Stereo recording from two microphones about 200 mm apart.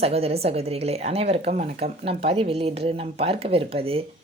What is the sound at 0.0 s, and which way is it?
Speech, 30° right (ahead or behind).